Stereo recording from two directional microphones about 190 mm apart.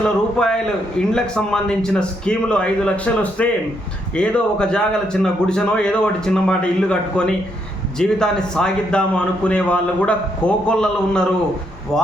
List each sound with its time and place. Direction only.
0.0 s a man's voice: 5° left (ahead or behind)